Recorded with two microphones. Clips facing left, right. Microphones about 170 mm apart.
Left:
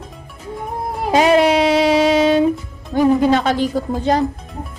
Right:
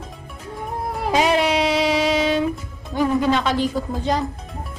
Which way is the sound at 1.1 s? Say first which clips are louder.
Left 6 dB; 50° left (ahead or behind).